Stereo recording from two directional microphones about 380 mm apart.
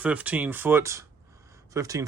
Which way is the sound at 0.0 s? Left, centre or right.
Centre.